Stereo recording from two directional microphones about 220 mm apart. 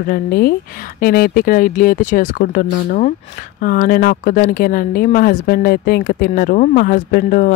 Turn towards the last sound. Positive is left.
turn(degrees=40)  # may be behind; listen again after turning